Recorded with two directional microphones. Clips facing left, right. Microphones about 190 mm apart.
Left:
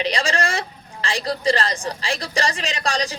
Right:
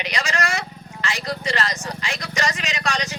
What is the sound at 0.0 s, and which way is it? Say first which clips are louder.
Speech: left 3 dB; 30° left (ahead or behind).